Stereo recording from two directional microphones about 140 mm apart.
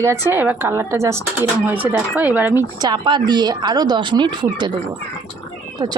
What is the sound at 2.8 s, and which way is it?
Speech, 35° right (ahead or behind).